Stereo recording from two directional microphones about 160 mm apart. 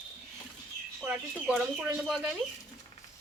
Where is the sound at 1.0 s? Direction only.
5° right (ahead or behind).